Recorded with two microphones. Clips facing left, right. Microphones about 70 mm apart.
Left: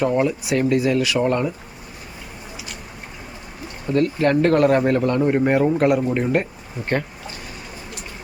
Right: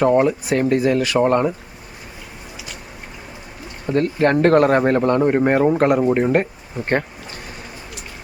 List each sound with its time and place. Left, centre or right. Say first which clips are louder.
0.0 s speech: right 4 dB; right
3.9 s speech: right 1 dB; right